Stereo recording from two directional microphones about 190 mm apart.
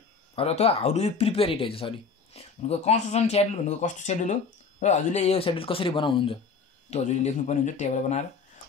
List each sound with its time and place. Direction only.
0.4 s speech: 30° left (ahead or behind)